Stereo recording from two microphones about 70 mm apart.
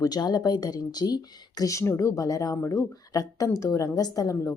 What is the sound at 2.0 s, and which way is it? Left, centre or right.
A woman's voice, left.